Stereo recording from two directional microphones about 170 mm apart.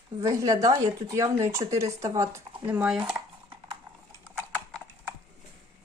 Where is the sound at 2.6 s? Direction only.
5° right (ahead or behind).